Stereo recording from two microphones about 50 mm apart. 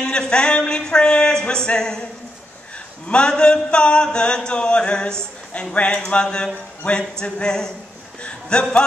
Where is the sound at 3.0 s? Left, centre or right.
Centre.